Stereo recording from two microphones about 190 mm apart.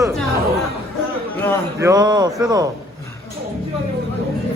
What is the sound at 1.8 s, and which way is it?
Speech, 20° right (ahead or behind).